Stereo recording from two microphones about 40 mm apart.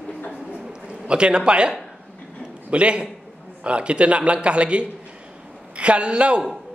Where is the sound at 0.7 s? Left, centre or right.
Right.